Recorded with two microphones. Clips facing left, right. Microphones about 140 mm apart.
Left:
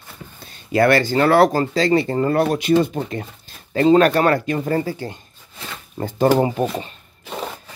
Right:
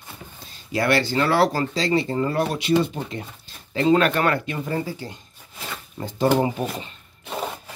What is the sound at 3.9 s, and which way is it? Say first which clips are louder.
Speech: left 5 dB; 35° left (ahead or behind).